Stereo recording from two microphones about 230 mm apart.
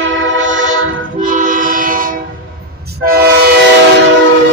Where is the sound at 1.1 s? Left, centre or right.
Right.